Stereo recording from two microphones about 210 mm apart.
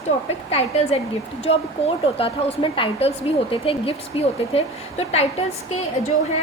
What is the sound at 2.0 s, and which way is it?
A woman's voice, 30° left (ahead or behind).